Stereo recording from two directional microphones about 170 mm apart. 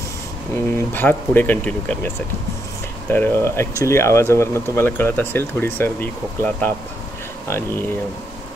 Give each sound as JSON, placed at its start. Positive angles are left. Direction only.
{"t": 0.9, "sound": "speech", "side_deg": 10}